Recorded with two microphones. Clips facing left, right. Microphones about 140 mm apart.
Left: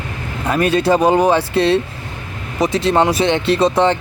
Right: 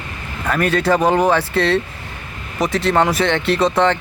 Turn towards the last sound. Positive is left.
turn(degrees=15)  # may be behind; listen again after turning